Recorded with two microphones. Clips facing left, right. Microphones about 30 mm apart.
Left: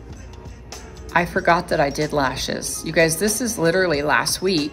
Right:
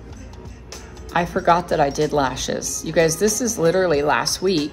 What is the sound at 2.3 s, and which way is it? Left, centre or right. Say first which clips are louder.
Speech: even; left.